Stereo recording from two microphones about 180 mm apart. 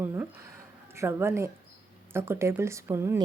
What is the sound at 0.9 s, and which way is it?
A woman's voice, 15° right (ahead or behind).